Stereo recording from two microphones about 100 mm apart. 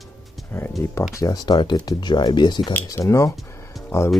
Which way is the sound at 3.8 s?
25° left (ahead or behind).